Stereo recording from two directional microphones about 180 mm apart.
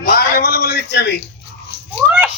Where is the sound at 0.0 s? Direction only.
60° left (ahead or behind).